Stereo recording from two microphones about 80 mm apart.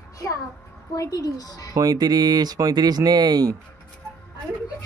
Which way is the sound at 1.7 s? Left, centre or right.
Right.